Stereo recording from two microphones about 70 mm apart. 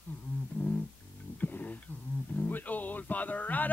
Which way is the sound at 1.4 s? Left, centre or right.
Left.